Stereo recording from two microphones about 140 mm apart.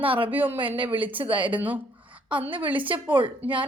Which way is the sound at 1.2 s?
35° right (ahead or behind).